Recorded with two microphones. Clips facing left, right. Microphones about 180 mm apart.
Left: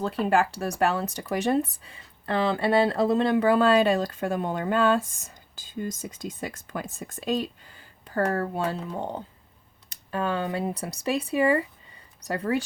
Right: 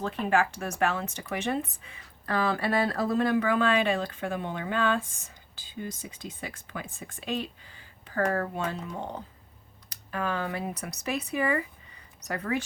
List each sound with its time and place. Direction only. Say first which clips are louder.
0.0 s speech: left 3 dB; 35° left (ahead or behind)